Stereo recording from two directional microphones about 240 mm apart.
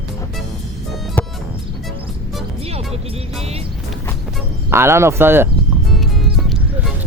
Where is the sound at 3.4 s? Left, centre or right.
Right.